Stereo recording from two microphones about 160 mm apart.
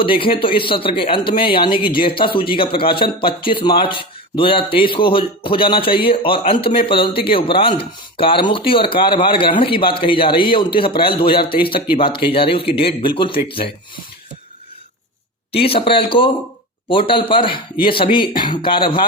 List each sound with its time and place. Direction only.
0.0 s speech: 35° left (ahead or behind)
15.5 s speech: 35° left (ahead or behind)